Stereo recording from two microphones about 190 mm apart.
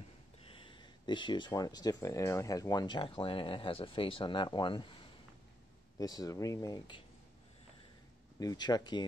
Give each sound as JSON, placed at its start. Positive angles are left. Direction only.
{"t": 0.7, "sound": "speech", "side_deg": 25}
{"t": 5.9, "sound": "speech", "side_deg": 20}
{"t": 8.4, "sound": "speech", "side_deg": 20}